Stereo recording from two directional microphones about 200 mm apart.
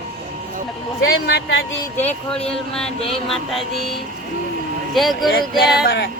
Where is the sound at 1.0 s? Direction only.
55° left (ahead or behind).